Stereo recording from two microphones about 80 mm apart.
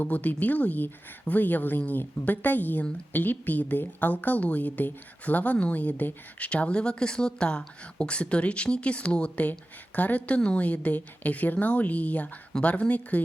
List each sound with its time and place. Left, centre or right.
0.0 s a woman's voice: left